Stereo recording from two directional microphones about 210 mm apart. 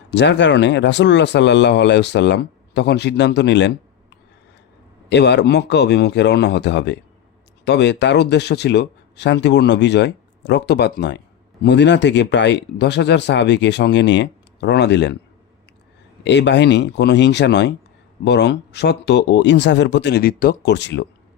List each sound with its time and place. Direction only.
0.1 s speech: 55° left (ahead or behind)
5.0 s speech: 55° left (ahead or behind)
16.2 s speech: 55° left (ahead or behind)